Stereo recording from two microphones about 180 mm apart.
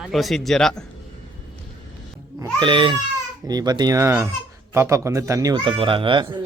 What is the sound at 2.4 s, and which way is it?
Speech, 25° right (ahead or behind).